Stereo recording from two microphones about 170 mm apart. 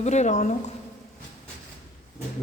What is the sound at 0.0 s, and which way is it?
Speech, 45° left (ahead or behind).